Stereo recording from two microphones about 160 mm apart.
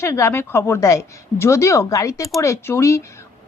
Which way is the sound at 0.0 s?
15° left (ahead or behind).